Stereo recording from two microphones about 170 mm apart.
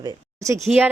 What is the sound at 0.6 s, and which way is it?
Speech, centre (ahead or behind).